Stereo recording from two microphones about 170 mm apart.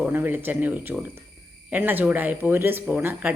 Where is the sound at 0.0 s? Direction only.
10° right (ahead or behind).